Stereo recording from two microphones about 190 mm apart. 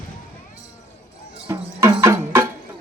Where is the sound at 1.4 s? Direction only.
15° right (ahead or behind).